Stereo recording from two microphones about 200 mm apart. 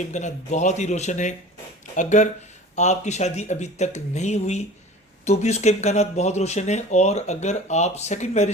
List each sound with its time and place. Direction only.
0.0 s speech: 35° left (ahead or behind)